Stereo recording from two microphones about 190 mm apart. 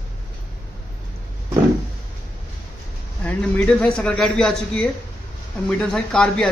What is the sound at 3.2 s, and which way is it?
Speech, 5° left (ahead or behind).